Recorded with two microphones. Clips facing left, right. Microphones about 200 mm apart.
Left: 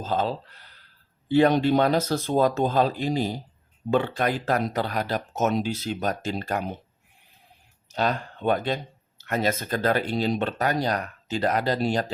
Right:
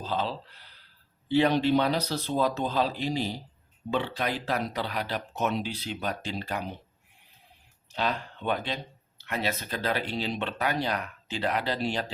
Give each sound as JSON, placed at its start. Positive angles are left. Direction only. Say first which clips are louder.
{"t": 0.0, "sound": "speech", "louder": "left 5 dB", "side_deg": 45}
{"t": 7.9, "sound": "speech", "louder": "left 4 dB", "side_deg": 45}